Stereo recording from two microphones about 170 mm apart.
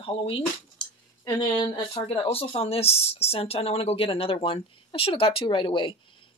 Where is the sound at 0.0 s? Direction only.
30° left (ahead or behind).